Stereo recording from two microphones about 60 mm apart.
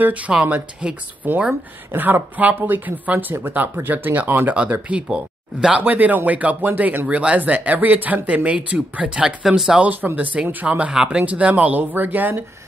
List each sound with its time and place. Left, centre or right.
0.3 s speech: centre
1.2 s speech: right
4.8 s speech: centre
5.8 s speech: right; by 9.8 s centre
9.8 s speech: right